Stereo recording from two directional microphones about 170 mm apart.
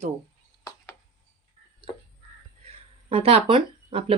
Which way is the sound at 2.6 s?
35° right (ahead or behind).